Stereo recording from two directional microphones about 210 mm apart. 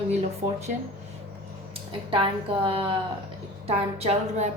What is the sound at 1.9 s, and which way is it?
A woman's voice, 25° right (ahead or behind).